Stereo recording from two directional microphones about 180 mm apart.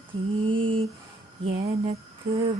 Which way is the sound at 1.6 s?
35° right (ahead or behind).